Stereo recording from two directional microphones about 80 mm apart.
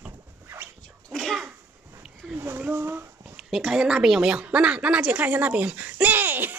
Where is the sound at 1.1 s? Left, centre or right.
Centre.